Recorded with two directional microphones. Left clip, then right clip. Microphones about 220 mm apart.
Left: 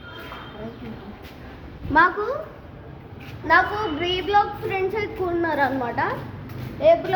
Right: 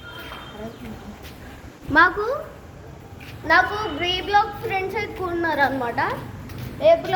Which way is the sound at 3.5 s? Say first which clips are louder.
Even; 15° right (ahead or behind).